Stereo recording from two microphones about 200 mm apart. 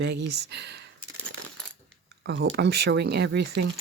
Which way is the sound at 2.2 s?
60° right (ahead or behind).